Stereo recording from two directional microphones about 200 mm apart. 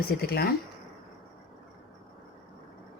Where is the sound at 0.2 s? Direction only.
50° left (ahead or behind).